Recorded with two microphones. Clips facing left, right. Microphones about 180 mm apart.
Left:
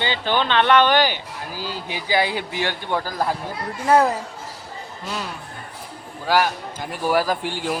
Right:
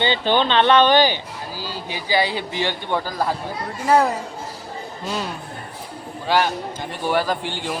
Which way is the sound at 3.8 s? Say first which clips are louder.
Even; 5° right (ahead or behind).